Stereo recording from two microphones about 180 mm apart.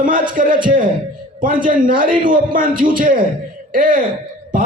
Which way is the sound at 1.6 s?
50° right (ahead or behind).